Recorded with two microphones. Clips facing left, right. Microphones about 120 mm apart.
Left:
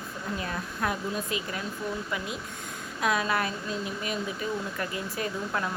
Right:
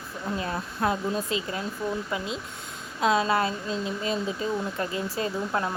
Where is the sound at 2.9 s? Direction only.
25° right (ahead or behind).